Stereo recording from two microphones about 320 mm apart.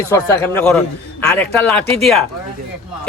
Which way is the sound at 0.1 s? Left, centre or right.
Centre.